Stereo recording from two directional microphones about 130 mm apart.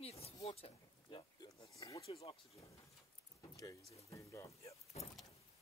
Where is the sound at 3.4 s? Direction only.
25° left (ahead or behind).